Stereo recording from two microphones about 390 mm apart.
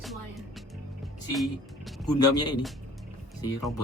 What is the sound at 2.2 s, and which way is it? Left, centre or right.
Speech, centre.